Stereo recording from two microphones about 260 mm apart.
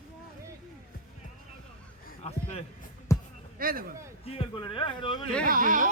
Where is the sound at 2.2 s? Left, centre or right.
Left.